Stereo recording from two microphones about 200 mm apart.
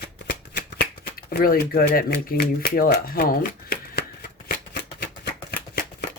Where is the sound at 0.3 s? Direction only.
50° left (ahead or behind).